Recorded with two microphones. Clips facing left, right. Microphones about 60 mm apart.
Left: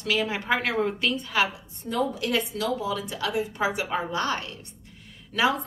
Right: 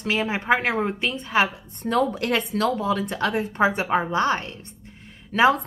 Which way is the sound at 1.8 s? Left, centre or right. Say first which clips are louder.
Right 5 dB; right.